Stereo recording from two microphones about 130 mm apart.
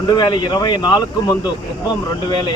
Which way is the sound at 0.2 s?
30° left (ahead or behind).